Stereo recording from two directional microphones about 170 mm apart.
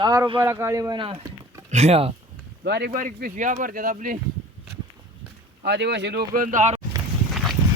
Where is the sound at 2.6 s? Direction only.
80° right.